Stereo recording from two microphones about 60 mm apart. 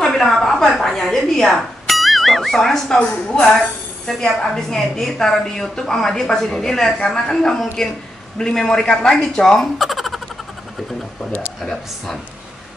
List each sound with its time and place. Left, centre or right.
0.0 s a woman's voice: centre
3.0 s a woman's voice: centre
9.8 s a sound: centre
11.6 s speech: centre